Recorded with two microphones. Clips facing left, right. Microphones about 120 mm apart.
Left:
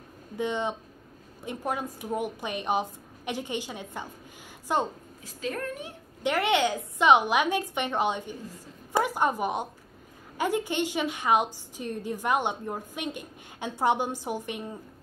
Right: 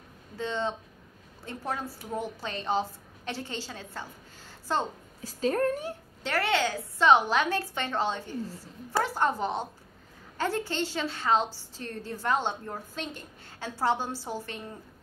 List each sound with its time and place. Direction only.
0.4 s a woman's voice: 15° left (ahead or behind)
5.2 s a woman's voice: 35° right (ahead or behind)
6.2 s a woman's voice: 20° left (ahead or behind)